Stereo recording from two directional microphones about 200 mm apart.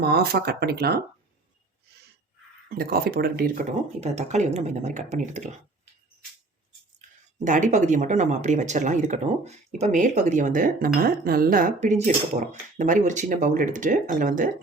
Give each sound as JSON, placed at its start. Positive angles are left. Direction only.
{"t": 0.0, "sound": "speech", "side_deg": -50}
{"t": 2.6, "sound": "speech", "side_deg": -50}
{"t": 4.0, "sound": "speech", "side_deg": -35}
{"t": 7.4, "sound": "speech", "side_deg": -40}